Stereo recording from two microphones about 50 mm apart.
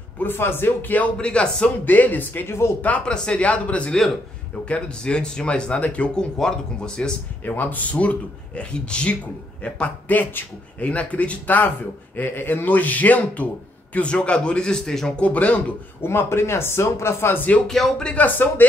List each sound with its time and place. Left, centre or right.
0.2 s speech: left
0.8 s speech: left
1.1 s a man's voice: left
1.9 s speech: left
2.4 s speech: left
3.1 s a man's voice: left
7.4 s a man's voice: left; by 14.8 s centre
14.9 s speech: centre
15.1 s a man's voice: left
16.0 s speech: left
17.6 s speech: centre
18.0 s a man's voice: left
18.6 s speech: left